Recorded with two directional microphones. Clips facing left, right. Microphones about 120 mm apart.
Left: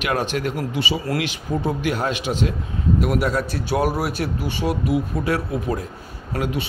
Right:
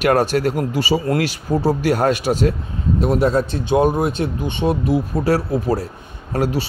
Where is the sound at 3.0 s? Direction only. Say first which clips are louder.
Right 5 dB; 30° right (ahead or behind).